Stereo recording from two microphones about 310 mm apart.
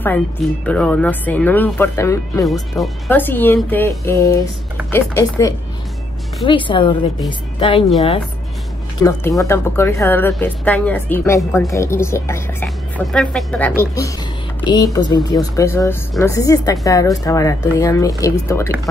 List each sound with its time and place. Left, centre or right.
0.7 s speech: centre
9.0 s speech: centre